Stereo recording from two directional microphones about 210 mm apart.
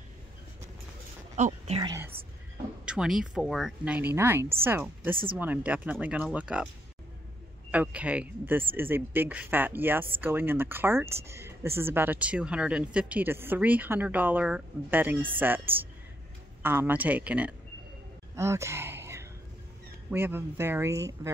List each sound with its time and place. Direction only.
1.3 s speech: 35° right (ahead or behind)
1.8 s speech: 15° right (ahead or behind)
2.8 s speech: 5° right (ahead or behind)
5.1 s speech: 25° right (ahead or behind)
5.4 s speech: 5° right (ahead or behind)
7.7 s speech: 5° right (ahead or behind)
18.3 s a sound: 15° right (ahead or behind)
20.1 s speech: 10° right (ahead or behind)